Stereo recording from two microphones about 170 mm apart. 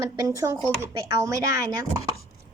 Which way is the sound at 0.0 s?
15° right (ahead or behind).